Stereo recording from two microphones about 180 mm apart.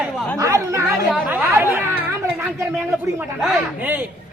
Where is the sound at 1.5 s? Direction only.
10° right (ahead or behind).